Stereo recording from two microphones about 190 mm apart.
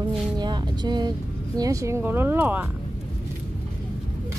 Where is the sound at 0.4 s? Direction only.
20° right (ahead or behind).